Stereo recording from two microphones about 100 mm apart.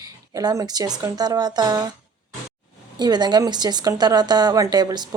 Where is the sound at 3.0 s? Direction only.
45° right (ahead or behind).